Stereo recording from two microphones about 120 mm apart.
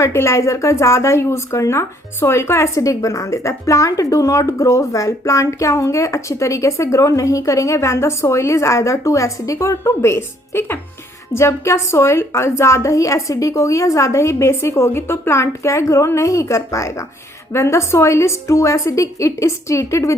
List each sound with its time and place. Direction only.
0.0 s speech: 25° left (ahead or behind)